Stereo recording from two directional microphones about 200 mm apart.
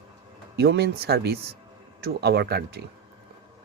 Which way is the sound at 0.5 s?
55° right (ahead or behind).